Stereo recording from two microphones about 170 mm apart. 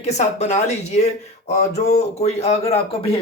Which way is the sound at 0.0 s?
40° left (ahead or behind).